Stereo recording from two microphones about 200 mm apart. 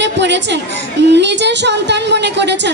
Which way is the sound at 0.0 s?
60° right (ahead or behind).